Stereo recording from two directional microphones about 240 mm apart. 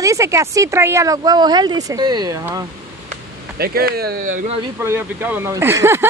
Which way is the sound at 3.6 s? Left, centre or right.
Right.